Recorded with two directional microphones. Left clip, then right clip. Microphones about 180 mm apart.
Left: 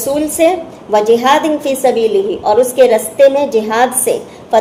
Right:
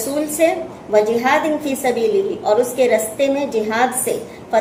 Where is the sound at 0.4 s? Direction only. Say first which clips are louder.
Left 4 dB; 40° left (ahead or behind).